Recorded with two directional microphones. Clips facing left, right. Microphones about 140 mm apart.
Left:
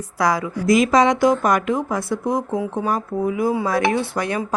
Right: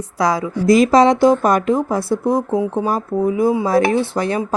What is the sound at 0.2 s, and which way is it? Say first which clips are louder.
A woman's voice: right 2 dB; 25° right (ahead or behind).